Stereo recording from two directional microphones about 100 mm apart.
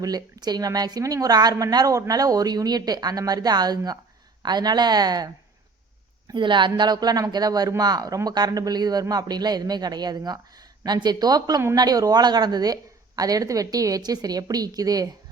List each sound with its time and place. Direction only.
0.0 s a woman's voice: 40° right (ahead or behind)
6.3 s a woman's voice: 50° right (ahead or behind)